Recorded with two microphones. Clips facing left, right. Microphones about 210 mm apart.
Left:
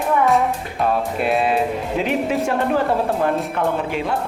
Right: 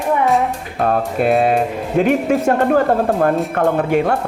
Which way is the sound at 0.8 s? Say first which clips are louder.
Right 4 dB; 50° right (ahead or behind).